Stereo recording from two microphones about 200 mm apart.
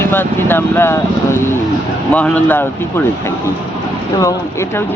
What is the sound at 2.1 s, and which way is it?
Speech, 5° left (ahead or behind).